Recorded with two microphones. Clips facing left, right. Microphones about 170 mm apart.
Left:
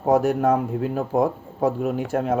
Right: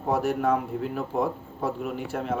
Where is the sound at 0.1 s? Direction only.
45° left (ahead or behind).